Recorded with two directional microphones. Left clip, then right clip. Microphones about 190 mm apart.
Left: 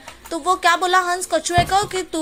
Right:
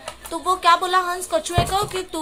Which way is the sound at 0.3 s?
15° left (ahead or behind).